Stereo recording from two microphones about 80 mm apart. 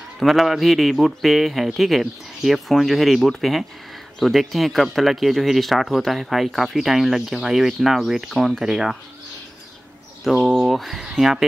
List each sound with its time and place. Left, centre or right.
0.2 s speech: centre
10.2 s speech: centre